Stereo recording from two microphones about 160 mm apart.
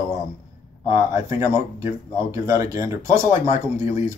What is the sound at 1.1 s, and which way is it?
Speech, 15° right (ahead or behind).